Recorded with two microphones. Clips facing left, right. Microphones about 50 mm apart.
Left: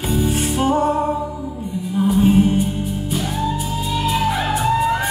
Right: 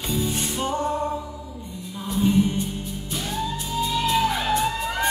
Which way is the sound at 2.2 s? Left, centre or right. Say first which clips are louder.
Left 4 dB; left.